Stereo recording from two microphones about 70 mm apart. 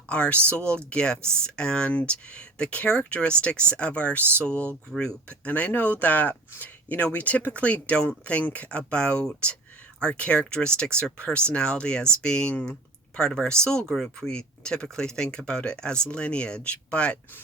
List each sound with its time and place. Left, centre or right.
0.1 s speech: centre
5.5 s speech: left